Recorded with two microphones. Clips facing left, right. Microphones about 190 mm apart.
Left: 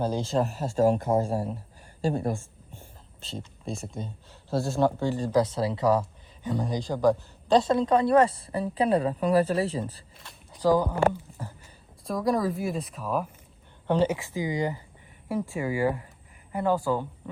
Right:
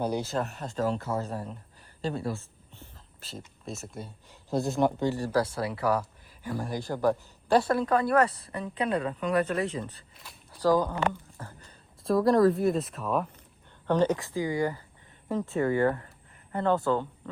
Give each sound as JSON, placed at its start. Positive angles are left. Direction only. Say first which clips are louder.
{"t": 0.0, "sound": "speech", "louder": "left 1 dB", "side_deg": -15}
{"t": 0.3, "sound": "speech", "louder": "left 6 dB", "side_deg": 5}
{"t": 2.1, "sound": "a woman's voice", "louder": "left 4 dB", "side_deg": 50}
{"t": 3.7, "sound": "speech", "louder": "left 4 dB", "side_deg": -5}
{"t": 5.1, "sound": "speech", "louder": "left 3 dB", "side_deg": 15}
{"t": 10.5, "sound": "speech", "louder": "left 1 dB", "side_deg": 15}
{"t": 11.3, "sound": "a sound", "louder": "left 4 dB", "side_deg": 15}
{"t": 12.0, "sound": "speech", "louder": "right 5 dB", "side_deg": 0}
{"t": 13.8, "sound": "speech", "louder": "even", "side_deg": 15}